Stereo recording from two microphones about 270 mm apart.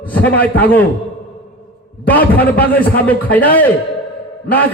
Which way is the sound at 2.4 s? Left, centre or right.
Centre.